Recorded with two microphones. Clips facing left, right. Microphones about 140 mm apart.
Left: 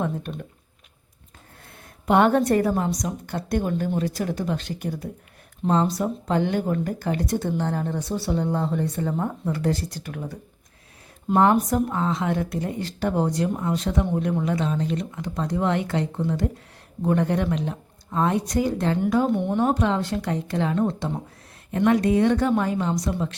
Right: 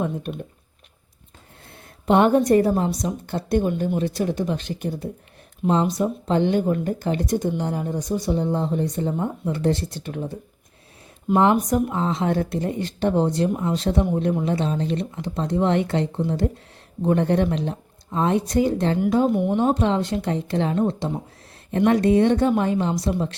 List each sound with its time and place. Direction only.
1.7 s a woman's voice: 25° right (ahead or behind)
11.7 s speech: 20° right (ahead or behind)
19.3 s speech: 5° right (ahead or behind)
19.5 s speech: 25° right (ahead or behind)